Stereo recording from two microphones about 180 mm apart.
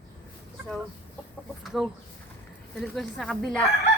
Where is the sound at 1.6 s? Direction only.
Centre (ahead or behind).